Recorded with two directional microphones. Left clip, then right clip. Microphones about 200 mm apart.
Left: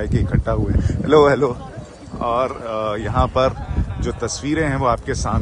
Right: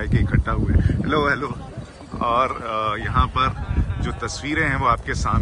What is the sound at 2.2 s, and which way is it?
Speech, 15° left (ahead or behind).